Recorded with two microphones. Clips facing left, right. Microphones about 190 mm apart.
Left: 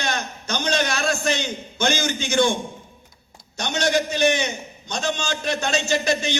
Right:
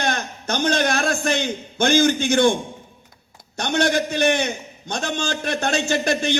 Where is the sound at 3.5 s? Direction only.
55° right (ahead or behind).